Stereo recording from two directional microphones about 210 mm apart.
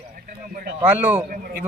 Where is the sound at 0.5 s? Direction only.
50° right (ahead or behind).